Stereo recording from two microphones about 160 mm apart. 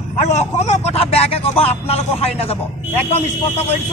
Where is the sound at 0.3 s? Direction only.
45° left (ahead or behind).